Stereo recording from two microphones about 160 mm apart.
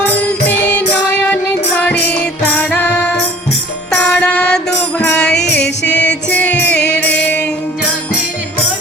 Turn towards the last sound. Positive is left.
turn(degrees=10)  # may be behind; listen again after turning